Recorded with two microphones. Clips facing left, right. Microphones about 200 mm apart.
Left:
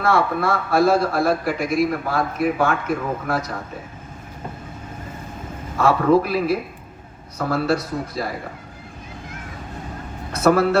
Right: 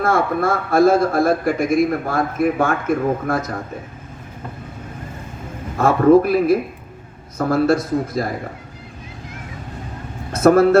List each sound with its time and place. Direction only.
0.0 s a man's voice: 50° right (ahead or behind)
5.7 s a man's voice: 50° right (ahead or behind)
10.3 s a man's voice: 50° right (ahead or behind)